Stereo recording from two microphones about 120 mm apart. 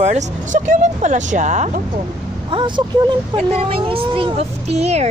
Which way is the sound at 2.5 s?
45° right (ahead or behind).